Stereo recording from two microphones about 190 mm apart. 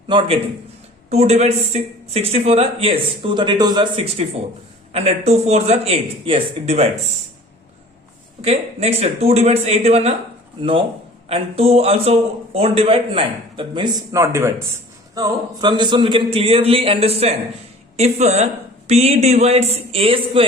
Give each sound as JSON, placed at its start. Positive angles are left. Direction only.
{"t": 0.1, "sound": "a man's voice", "side_deg": -25}
{"t": 8.4, "sound": "a man's voice", "side_deg": -30}